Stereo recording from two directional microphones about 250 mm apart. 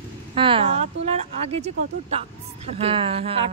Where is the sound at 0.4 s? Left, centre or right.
Right.